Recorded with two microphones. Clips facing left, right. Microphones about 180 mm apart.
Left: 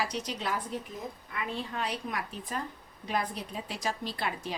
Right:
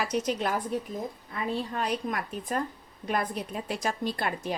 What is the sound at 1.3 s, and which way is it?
Speech, 35° right (ahead or behind).